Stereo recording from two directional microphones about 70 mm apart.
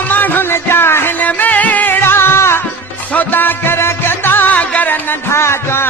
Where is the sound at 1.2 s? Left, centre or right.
Left.